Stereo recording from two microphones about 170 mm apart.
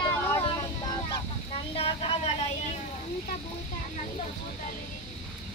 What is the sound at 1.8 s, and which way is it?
Vehicle, 35° left (ahead or behind).